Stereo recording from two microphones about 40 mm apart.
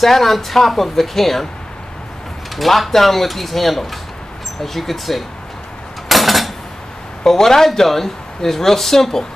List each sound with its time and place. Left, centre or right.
0.0 s speech: centre
2.5 s speech: centre
6.0 s dishes: centre
7.2 s speech: centre